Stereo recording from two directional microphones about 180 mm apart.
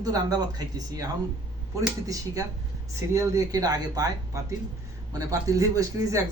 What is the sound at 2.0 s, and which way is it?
Speech, 20° right (ahead or behind).